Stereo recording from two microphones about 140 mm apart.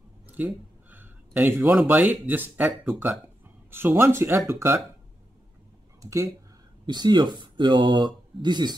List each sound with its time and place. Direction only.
0.3 s a sound: 15° right (ahead or behind)
1.6 s speech: 5° right (ahead or behind)
6.0 s speech: 20° right (ahead or behind)
6.9 s speech: 30° right (ahead or behind)